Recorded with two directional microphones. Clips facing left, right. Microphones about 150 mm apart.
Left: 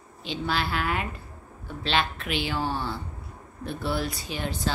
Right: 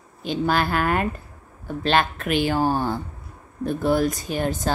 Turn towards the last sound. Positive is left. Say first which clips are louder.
# right 6 dB
turn(degrees=-45)  # may be behind; listen again after turning